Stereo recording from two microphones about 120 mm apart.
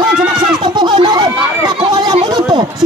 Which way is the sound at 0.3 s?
40° right (ahead or behind).